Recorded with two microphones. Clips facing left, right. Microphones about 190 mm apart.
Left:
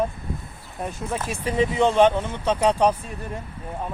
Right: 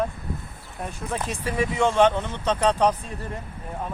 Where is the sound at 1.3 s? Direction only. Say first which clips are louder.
Left 4 dB; 20° left (ahead or behind).